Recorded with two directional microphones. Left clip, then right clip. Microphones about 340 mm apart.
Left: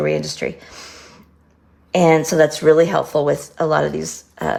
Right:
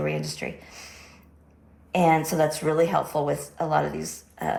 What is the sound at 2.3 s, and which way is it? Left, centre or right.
Speech, left.